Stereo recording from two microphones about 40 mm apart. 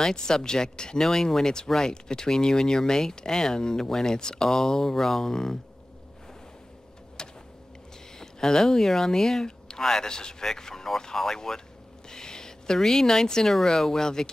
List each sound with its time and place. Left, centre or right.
0.0 s speech: centre
7.2 s vehicle: left
8.2 s speech: centre
12.1 s a sound: centre
13.7 s speech: centre